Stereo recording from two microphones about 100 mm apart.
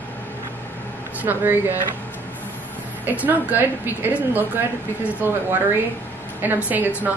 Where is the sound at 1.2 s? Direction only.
20° right (ahead or behind).